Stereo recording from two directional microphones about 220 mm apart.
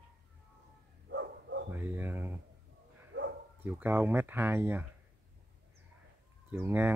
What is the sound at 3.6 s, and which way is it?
Speech, 10° right (ahead or behind).